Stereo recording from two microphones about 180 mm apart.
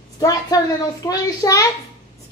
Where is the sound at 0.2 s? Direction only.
20° left (ahead or behind).